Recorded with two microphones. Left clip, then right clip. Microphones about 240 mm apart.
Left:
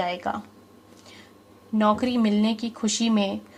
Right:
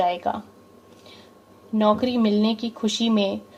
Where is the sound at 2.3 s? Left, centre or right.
Left.